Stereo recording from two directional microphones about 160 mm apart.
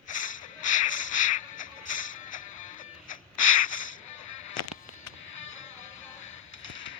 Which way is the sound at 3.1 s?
55° left (ahead or behind).